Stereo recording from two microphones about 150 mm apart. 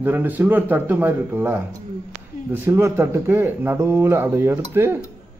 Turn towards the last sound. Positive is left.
turn(degrees=-15)  # may be behind; listen again after turning